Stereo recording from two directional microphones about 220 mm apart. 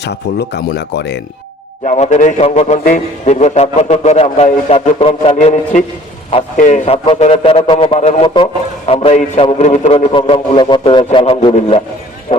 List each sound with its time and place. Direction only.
0.0 s speech: 50° left (ahead or behind)
1.8 s a man's voice: 30° left (ahead or behind)